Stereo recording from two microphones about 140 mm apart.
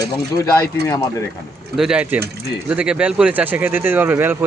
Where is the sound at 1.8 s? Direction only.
5° right (ahead or behind).